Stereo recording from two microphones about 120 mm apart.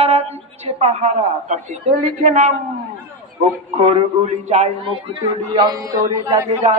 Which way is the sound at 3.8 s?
60° right (ahead or behind).